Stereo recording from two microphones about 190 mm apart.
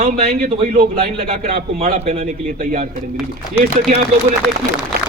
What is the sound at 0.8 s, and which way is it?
Speech, 55° right (ahead or behind).